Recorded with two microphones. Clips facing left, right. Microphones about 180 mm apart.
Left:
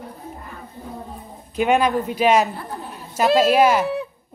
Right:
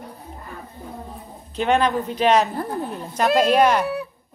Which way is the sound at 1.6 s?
10° left (ahead or behind).